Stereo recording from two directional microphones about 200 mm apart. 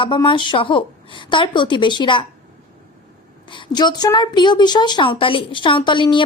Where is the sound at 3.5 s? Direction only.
20° left (ahead or behind).